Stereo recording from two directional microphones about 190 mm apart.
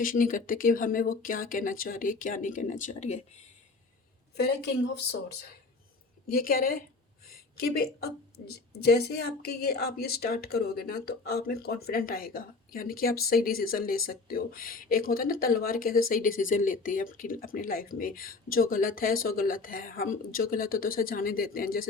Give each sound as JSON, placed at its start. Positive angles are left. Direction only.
{"t": 0.0, "sound": "speech", "side_deg": 45}
{"t": 4.4, "sound": "speech", "side_deg": 60}